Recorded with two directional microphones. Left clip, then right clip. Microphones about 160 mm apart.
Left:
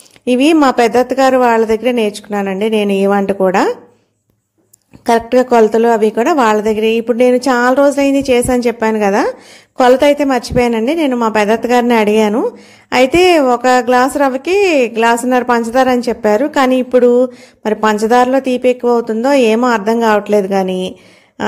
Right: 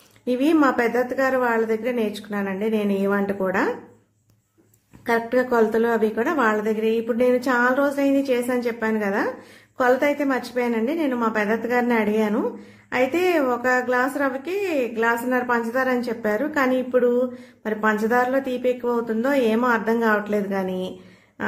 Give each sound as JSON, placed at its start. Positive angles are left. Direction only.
{"t": 0.2, "sound": "a woman's voice", "side_deg": 40}
{"t": 5.0, "sound": "a woman's voice", "side_deg": 40}